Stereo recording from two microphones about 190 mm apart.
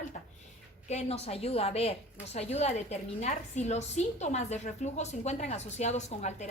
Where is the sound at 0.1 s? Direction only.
45° left (ahead or behind).